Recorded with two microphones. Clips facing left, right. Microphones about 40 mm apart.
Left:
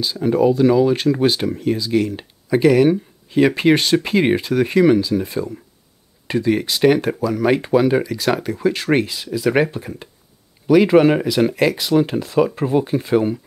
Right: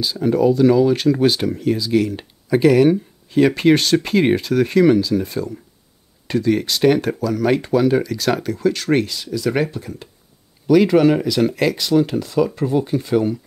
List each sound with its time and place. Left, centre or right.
0.0 s speech: centre